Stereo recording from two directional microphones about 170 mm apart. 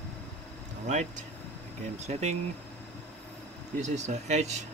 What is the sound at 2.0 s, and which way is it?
Speech, 40° right (ahead or behind).